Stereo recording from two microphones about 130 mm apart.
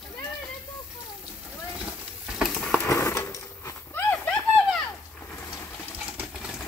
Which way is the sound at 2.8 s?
20° left (ahead or behind).